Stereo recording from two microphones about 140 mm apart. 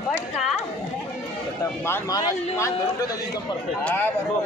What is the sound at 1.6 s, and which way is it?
Speech, 20° left (ahead or behind).